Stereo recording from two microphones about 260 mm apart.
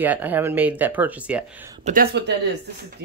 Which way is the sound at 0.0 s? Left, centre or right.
Centre.